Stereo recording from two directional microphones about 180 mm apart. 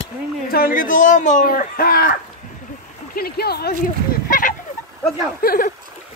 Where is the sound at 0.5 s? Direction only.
55° left (ahead or behind).